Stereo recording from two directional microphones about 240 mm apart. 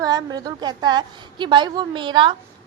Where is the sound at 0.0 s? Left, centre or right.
Centre.